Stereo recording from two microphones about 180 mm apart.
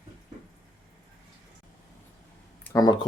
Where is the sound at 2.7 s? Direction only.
20° left (ahead or behind).